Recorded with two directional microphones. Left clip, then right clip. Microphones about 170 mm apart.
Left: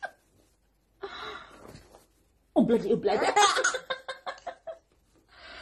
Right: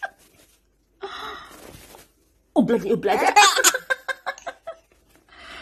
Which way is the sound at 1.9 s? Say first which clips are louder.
Right 8 dB; 50° right (ahead or behind).